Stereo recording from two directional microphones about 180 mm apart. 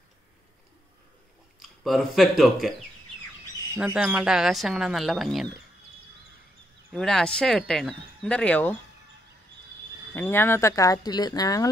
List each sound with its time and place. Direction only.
1.6 s speech: centre (ahead or behind)
3.7 s speech: 5° right (ahead or behind)
6.9 s speech: 5° left (ahead or behind)
10.1 s speech: 10° left (ahead or behind)